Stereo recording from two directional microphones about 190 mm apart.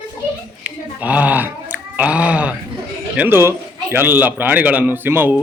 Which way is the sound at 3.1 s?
10° right (ahead or behind).